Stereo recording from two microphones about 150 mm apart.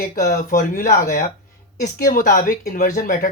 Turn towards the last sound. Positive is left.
turn(degrees=65)  # may be behind; listen again after turning